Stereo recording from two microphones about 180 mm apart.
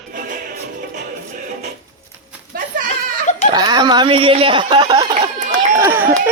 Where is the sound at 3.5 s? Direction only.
25° right (ahead or behind).